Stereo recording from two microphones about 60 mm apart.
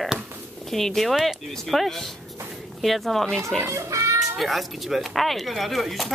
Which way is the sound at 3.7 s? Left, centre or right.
Right.